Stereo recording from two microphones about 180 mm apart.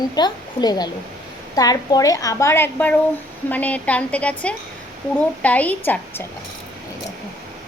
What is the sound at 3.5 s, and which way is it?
A woman's voice, 10° left (ahead or behind).